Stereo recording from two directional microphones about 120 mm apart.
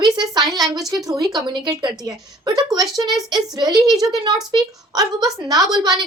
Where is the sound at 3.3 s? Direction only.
35° right (ahead or behind).